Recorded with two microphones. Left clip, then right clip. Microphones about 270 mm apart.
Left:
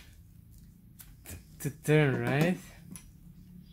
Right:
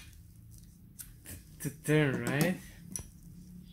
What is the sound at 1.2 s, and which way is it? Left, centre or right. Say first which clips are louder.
Speech: left 2 dB; left.